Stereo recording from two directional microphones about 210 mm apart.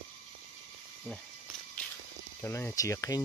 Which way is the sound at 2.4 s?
10° left (ahead or behind).